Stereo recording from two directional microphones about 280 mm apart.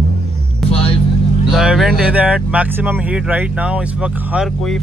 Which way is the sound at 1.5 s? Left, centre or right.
Centre.